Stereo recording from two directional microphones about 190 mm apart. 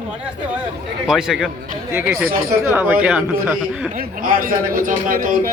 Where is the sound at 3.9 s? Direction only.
50° right (ahead or behind).